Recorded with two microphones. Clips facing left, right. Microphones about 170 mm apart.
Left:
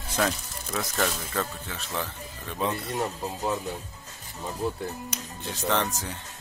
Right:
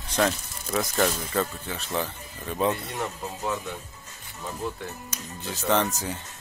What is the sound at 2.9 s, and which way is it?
Speech, 15° left (ahead or behind).